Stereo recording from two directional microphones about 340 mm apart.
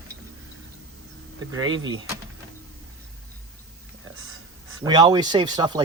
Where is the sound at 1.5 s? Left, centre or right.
Centre.